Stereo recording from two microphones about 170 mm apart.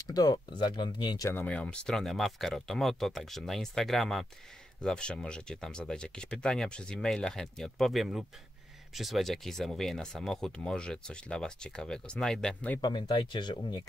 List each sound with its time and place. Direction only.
0.1 s speech: 25° left (ahead or behind)
1.3 s speech: 10° left (ahead or behind)
12.8 s speech: 25° left (ahead or behind)